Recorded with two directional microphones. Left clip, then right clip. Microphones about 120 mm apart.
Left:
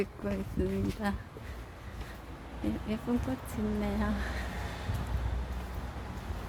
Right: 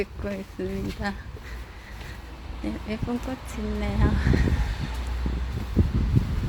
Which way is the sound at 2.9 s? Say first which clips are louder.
Right 4 dB; centre (ahead or behind).